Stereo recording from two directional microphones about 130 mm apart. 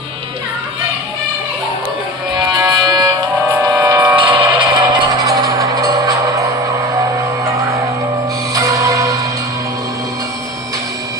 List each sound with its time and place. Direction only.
2.6 s music: 30° right (ahead or behind)
4.2 s music: 40° right (ahead or behind)
5.2 s music: 25° right (ahead or behind)
8.5 s music: 25° right (ahead or behind)